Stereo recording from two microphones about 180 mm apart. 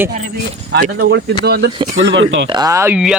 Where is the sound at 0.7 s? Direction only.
65° right (ahead or behind).